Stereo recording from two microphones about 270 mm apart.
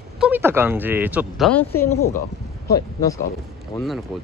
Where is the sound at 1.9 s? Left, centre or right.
Left.